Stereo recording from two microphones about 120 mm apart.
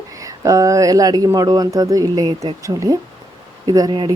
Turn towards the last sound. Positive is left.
turn(degrees=-40)  # may be behind; listen again after turning